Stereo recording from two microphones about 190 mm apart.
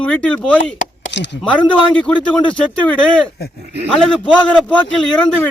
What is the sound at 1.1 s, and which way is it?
Speech, 65° left (ahead or behind).